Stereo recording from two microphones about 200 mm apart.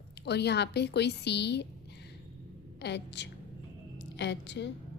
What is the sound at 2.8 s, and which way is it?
A woman's voice, 60° left (ahead or behind).